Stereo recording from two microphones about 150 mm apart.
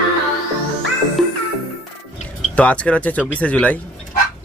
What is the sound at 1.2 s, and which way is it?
Music, centre (ahead or behind).